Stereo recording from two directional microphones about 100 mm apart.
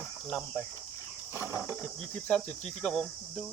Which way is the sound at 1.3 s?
25° right (ahead or behind).